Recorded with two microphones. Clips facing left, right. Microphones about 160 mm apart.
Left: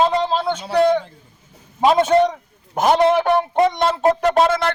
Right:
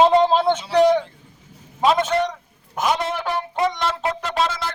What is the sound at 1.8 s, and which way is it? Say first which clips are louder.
Speech: left 4 dB; 30° left (ahead or behind).